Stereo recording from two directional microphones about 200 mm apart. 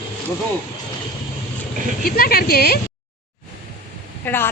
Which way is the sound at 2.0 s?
50° left (ahead or behind).